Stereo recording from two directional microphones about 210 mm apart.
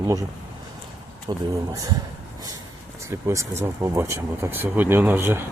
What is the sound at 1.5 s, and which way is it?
Speech, 15° right (ahead or behind).